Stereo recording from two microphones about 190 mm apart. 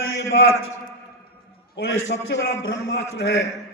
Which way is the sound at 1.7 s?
65° left (ahead or behind).